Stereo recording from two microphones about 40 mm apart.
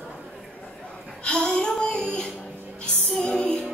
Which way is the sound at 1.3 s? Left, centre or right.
Left.